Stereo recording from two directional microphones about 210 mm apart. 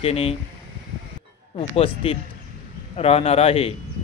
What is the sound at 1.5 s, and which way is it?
A man's voice, 25° left (ahead or behind).